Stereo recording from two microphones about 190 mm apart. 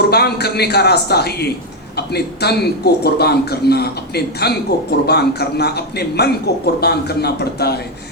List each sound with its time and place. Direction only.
0.1 s speech: 55° left (ahead or behind)